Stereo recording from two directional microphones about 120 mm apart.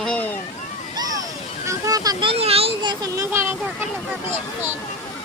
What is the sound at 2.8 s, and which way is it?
Speech, 30° right (ahead or behind).